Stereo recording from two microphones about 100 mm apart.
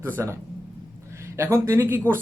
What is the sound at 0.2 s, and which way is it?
Speech, 25° right (ahead or behind).